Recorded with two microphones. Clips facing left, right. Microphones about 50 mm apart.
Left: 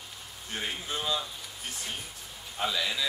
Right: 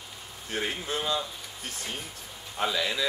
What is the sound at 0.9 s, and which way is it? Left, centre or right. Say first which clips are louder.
Speech: right 2 dB; centre.